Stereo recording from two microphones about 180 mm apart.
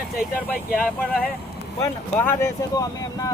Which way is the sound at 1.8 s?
15° left (ahead or behind).